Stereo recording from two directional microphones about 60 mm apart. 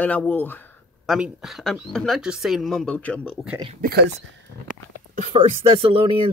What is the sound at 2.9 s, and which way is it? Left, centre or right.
Speech, left.